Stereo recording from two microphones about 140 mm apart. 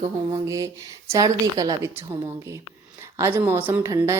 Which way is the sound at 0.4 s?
25° right (ahead or behind).